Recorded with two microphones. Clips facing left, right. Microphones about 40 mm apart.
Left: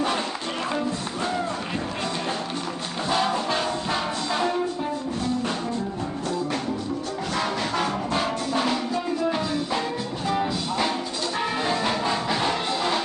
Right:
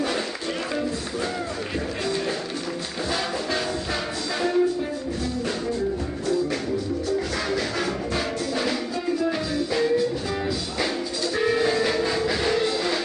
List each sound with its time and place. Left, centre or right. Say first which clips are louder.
3.1 s brass instrument: left 4 dB; centre
4.4 s music: right 4 dB; centre
7.7 s music: left 1 dB; centre
9.8 s music: right 6 dB; centre